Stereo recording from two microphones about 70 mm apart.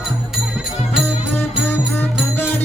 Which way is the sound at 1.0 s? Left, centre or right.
Left.